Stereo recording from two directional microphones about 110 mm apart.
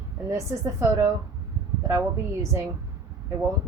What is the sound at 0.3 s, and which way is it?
Speech, 30° right (ahead or behind).